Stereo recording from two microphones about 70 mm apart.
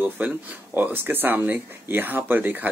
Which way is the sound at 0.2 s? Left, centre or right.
Right.